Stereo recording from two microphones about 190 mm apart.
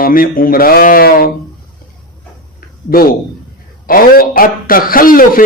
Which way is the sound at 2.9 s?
50° left (ahead or behind).